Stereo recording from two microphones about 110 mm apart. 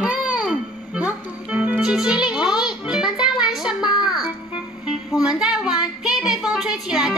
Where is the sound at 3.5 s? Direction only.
5° right (ahead or behind).